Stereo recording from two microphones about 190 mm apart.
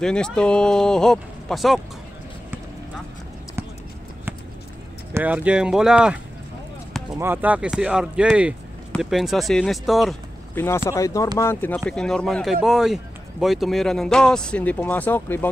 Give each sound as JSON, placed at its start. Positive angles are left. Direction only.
{"t": 0.0, "sound": "speech", "side_deg": 5}
{"t": 5.1, "sound": "speech", "side_deg": -10}
{"t": 7.2, "sound": "speech", "side_deg": -10}
{"t": 10.5, "sound": "speech", "side_deg": 15}